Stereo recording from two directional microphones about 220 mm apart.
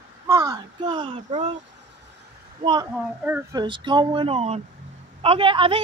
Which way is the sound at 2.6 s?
20° right (ahead or behind).